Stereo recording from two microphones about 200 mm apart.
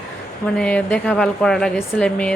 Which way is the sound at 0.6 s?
5° left (ahead or behind).